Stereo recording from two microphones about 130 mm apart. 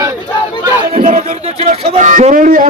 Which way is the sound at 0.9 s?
90° right.